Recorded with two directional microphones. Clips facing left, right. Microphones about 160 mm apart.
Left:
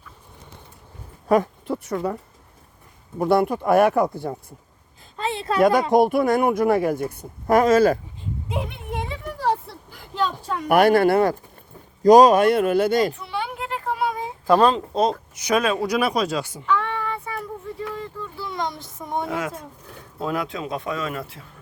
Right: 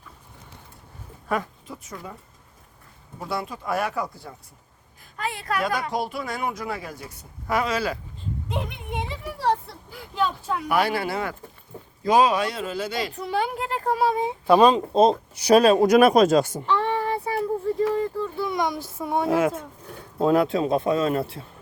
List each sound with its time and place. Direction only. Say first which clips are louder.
1.3 s speech: left 9 dB; 40° left (ahead or behind)
1.6 s a woman's voice: left 13 dB; 70° left (ahead or behind)
3.2 s speech: left 12 dB; 55° left (ahead or behind)
5.1 s a sound: left 5 dB; 25° left (ahead or behind)
5.9 s a woman's voice: left 12 dB; 55° left (ahead or behind)
8.4 s a sound: left 2 dB; 5° left (ahead or behind)
10.7 s a woman's voice: left 9 dB; 50° left (ahead or behind)
12.0 s a woman's voice: left 8 dB; 40° left (ahead or behind)
13.1 s a sound: right 3 dB; 40° right (ahead or behind)
14.4 s speech: right 1 dB; 10° right (ahead or behind)
14.9 s speech: right 4 dB; 25° right (ahead or behind); by 16.6 s 45° right (ahead or behind)
16.6 s child singing: right 1 dB; 30° right (ahead or behind)
18.3 s a sound: right 1 dB; 15° right (ahead or behind)
19.3 s a man's voice: right 6 dB; 25° right (ahead or behind)